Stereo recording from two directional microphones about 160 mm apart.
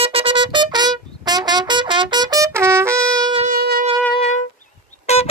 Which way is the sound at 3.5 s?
75° right (ahead or behind).